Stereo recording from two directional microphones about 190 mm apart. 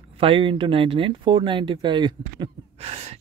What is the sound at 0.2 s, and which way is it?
Speech, 25° right (ahead or behind).